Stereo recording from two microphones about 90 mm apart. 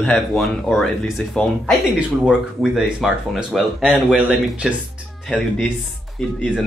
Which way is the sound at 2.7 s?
5° right (ahead or behind).